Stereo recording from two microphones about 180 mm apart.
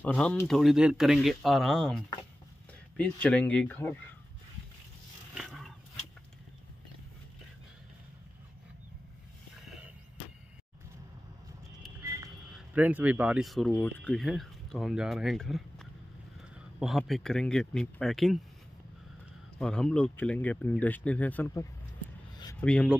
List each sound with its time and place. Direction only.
0.0 s speech: 5° left (ahead or behind)
5.3 s roaring cats: centre (ahead or behind)
12.0 s music: 15° right (ahead or behind)
12.5 s speech: 10° right (ahead or behind)
19.6 s speech: 5° left (ahead or behind)